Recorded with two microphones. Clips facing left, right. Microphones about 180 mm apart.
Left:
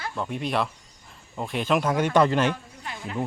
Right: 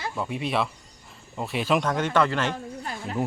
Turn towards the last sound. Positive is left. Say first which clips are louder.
# right 3 dB
turn(degrees=-40)  # may be behind; listen again after turning